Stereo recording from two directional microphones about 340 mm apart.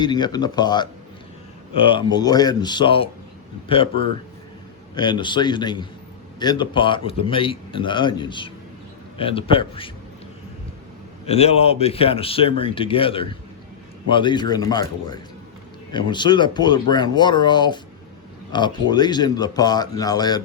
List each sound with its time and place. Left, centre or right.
0.0 s a man's voice: centre
1.9 s a man's voice: centre
11.3 s a man's voice: centre